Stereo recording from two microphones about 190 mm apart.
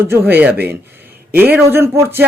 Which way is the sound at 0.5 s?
55° right (ahead or behind).